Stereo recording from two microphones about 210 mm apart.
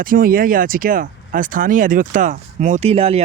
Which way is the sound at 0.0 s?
45° right (ahead or behind).